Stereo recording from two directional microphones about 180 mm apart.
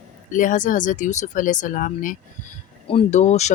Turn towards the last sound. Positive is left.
turn(degrees=40)  # may be behind; listen again after turning